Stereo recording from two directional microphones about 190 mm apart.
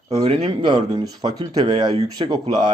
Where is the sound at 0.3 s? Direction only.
30° right (ahead or behind).